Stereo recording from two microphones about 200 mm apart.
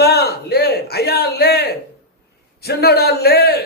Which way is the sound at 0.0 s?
55° left (ahead or behind).